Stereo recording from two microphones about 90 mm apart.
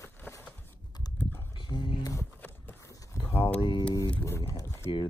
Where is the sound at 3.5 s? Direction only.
70° left (ahead or behind).